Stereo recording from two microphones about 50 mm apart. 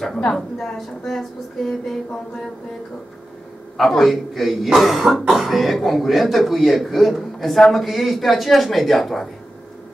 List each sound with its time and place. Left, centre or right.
0.7 s a man's voice: centre
3.7 s a man's voice: centre